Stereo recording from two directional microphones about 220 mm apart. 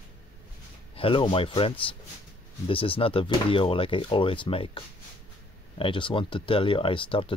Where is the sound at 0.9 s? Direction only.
25° left (ahead or behind).